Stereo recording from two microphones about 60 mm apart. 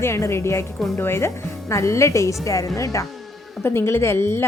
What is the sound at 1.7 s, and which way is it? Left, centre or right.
A woman's voice, left.